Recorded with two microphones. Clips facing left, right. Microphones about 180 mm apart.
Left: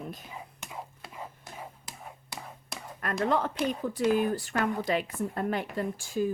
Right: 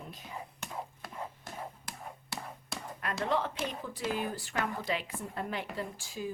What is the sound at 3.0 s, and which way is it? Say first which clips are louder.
Speech: left 4 dB; 50° left (ahead or behind).